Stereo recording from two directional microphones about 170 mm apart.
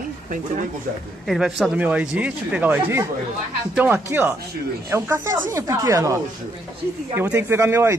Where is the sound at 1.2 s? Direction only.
Centre (ahead or behind); by 6.1 s 20° right (ahead or behind).